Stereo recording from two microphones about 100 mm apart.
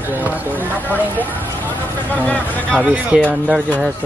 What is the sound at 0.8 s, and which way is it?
Speech, 20° left (ahead or behind).